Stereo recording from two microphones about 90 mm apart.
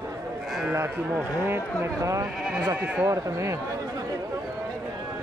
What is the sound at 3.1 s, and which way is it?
Speech, 35° right (ahead or behind).